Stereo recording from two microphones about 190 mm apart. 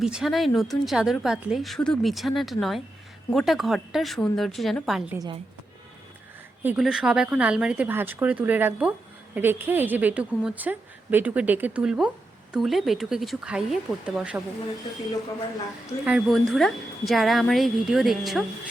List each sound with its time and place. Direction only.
0.0 s a woman's voice: 5° right (ahead or behind)
5.1 s a woman's voice: 20° right (ahead or behind)
6.6 s a woman's voice: 5° right (ahead or behind)
16.0 s a woman's voice: centre (ahead or behind)